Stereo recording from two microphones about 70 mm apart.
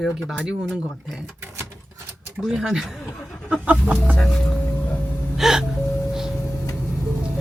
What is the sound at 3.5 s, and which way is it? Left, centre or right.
Speech, centre.